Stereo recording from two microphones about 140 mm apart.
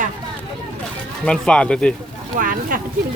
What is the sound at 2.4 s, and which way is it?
Speech, 80° right.